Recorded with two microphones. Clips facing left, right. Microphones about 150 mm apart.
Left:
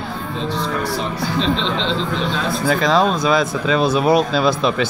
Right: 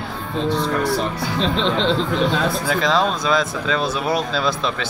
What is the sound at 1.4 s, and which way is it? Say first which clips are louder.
Speech: right 1 dB; 50° right (ahead or behind).